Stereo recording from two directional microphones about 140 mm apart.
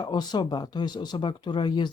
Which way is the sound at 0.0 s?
30° left (ahead or behind).